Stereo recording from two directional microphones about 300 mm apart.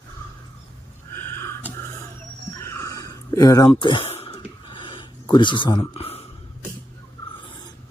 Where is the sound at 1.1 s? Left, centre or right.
Centre.